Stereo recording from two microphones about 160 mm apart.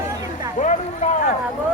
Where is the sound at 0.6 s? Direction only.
50° left (ahead or behind).